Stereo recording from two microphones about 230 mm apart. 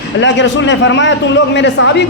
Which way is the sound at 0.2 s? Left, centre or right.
Left.